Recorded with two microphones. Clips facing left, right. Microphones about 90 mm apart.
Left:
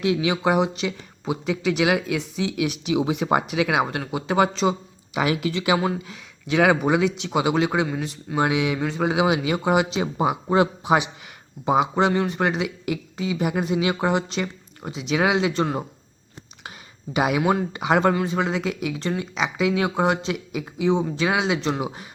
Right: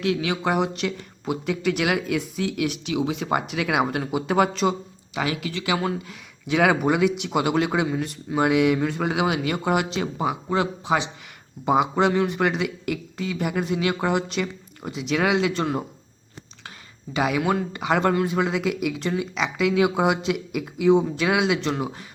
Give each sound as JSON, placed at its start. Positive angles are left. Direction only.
{"t": 0.0, "sound": "speech", "side_deg": 15}
{"t": 5.1, "sound": "speech", "side_deg": 25}
{"t": 6.1, "sound": "a man's voice", "side_deg": 0}
{"t": 11.6, "sound": "speech", "side_deg": 0}
{"t": 17.3, "sound": "speech", "side_deg": 10}